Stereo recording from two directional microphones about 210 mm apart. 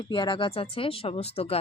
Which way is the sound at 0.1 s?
25° left (ahead or behind).